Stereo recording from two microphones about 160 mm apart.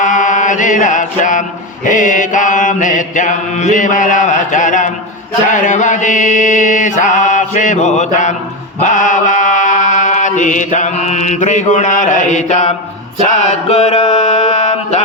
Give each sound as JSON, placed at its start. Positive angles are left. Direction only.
{"t": 0.0, "sound": "chant", "side_deg": 50}
{"t": 8.8, "sound": "mantra", "side_deg": 50}